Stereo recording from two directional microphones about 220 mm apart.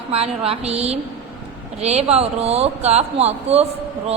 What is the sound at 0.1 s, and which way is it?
Speech, 25° right (ahead or behind).